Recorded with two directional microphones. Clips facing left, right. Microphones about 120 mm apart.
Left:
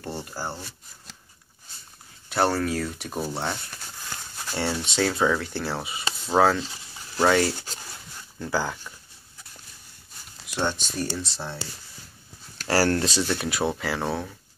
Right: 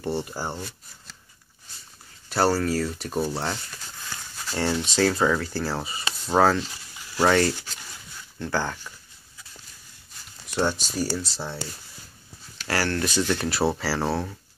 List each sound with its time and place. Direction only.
0.2 s speech: 10° right (ahead or behind)
2.3 s speech: 5° right (ahead or behind)
3.7 s a sound: 15° left (ahead or behind)
4.6 s speech: centre (ahead or behind)
7.5 s a sound: 35° left (ahead or behind)
8.4 s speech: 5° left (ahead or behind)
10.6 s speech: 5° right (ahead or behind)
12.6 s speech: 35° left (ahead or behind)
13.2 s speech: 5° left (ahead or behind)